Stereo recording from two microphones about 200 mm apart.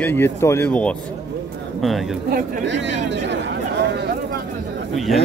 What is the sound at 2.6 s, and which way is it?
Speech, 65° right (ahead or behind).